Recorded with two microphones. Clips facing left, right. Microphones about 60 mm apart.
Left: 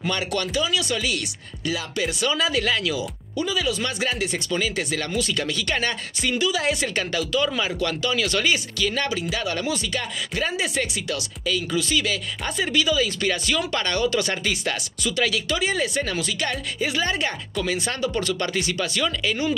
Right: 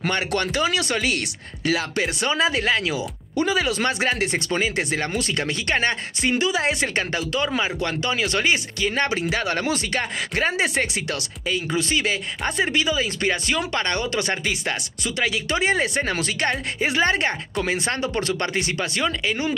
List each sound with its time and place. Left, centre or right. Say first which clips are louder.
0.0 s speech: right 2 dB; right
3.5 s speech: right 3 dB; right
11.4 s speech: right 1 dB; right
15.5 s speech: right 2 dB; right